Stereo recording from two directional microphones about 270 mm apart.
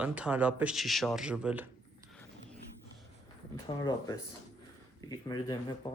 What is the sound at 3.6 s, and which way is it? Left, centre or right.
Speech, centre.